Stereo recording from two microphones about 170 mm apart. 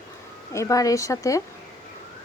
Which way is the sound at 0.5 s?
20° left (ahead or behind).